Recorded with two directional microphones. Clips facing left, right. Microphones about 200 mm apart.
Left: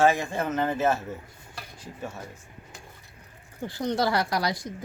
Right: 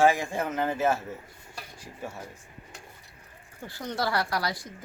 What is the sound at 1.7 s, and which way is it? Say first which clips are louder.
Stir: left 2 dB; 10° right (ahead or behind).